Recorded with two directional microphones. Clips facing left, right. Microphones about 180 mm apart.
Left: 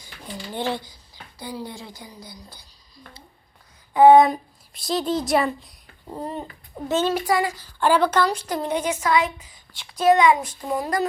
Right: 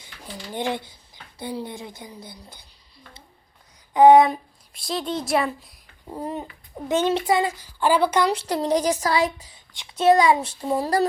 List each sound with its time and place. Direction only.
0.5 s a woman's voice: 15° right (ahead or behind)
3.9 s speech: 15° right (ahead or behind)
4.2 s a child's voice: centre (ahead or behind); by 7.7 s 25° right (ahead or behind)
7.8 s speech: 10° right (ahead or behind)
8.3 s speech: 30° right (ahead or behind)
9.7 s a woman's voice: 20° right (ahead or behind)